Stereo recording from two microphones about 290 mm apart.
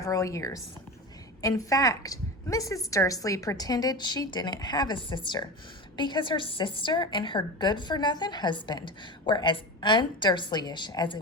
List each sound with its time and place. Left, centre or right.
0.0 s a woman's voice: centre